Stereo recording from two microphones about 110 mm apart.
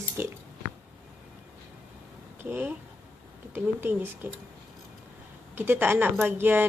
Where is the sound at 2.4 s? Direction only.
20° right (ahead or behind).